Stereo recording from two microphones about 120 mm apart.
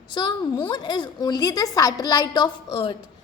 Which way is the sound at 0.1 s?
35° left (ahead or behind).